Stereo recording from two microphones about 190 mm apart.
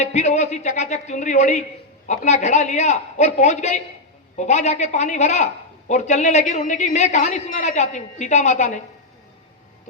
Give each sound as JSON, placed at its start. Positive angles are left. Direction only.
{"t": 0.0, "sound": "a woman's voice", "side_deg": 35}